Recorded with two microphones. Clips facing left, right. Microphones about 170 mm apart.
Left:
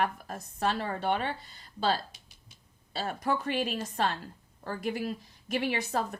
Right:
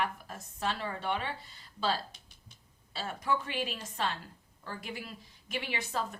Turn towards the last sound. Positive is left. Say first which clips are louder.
# left 5 dB
turn(degrees=45)  # may be behind; listen again after turning